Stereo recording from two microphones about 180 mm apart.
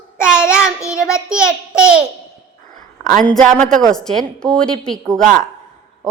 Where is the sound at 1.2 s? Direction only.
5° right (ahead or behind).